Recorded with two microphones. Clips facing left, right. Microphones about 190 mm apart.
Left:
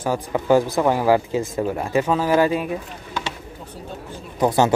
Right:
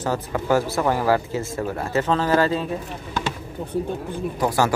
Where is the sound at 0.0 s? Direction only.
15° left (ahead or behind).